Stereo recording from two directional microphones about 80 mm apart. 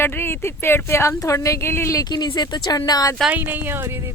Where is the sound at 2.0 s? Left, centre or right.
Left.